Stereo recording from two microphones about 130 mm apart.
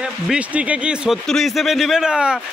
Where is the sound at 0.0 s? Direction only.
10° right (ahead or behind).